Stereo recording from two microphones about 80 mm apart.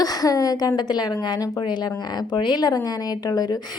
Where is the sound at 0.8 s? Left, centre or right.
Left.